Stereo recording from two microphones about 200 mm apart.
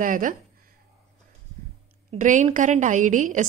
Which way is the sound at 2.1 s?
40° right (ahead or behind).